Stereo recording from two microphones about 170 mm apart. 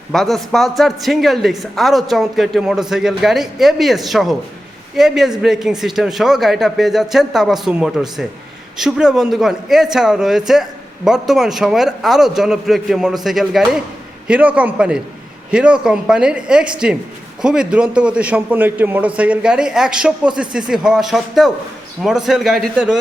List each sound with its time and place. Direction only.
0.1 s a man's voice: centre (ahead or behind)